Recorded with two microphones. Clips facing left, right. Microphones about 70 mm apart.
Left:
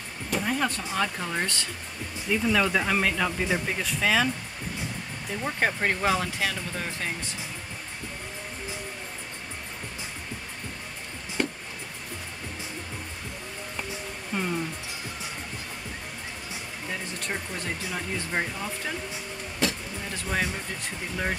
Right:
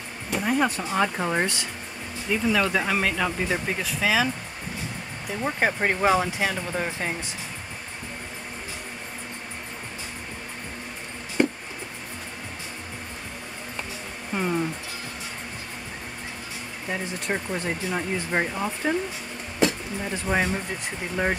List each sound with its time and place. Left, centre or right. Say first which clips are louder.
0.3 s a sound: right 4 dB; centre
0.9 s speech: right 5 dB; right
2.2 s speech: right 1 dB; centre
5.3 s speech: right 3 dB; centre
11.4 s a sound: right 6 dB; right
14.3 s music: right 4 dB; centre
16.9 s speech: right 5 dB; right